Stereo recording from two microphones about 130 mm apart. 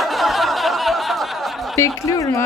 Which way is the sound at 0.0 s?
Centre (ahead or behind).